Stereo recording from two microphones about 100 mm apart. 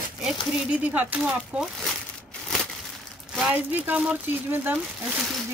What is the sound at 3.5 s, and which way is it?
Speech, 15° right (ahead or behind).